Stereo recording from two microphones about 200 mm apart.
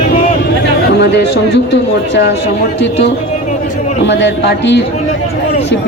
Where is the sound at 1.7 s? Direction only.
60° left (ahead or behind).